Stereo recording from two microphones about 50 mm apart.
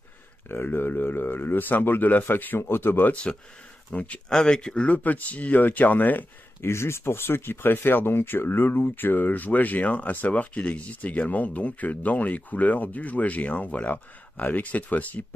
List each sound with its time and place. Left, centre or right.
0.5 s speech: left
3.1 s speech: left
4.3 s speech: centre
4.8 s speech: left
6.6 s speech: left